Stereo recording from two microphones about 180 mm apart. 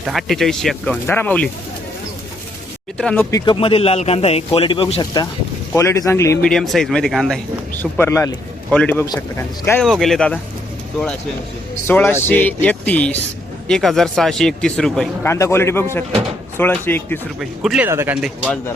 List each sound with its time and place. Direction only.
0.0 s speech: centre (ahead or behind)
3.0 s speech: 5° left (ahead or behind)
3.3 s a man's voice: 25° left (ahead or behind)
6.4 s speech: 5° left (ahead or behind)
9.8 s speech: centre (ahead or behind)
11.7 s speech: 10° left (ahead or behind)
15.3 s speech: 15° left (ahead or behind)
17.4 s speech: centre (ahead or behind)
17.8 s speech: 10° right (ahead or behind)
18.2 s speech: 5° left (ahead or behind)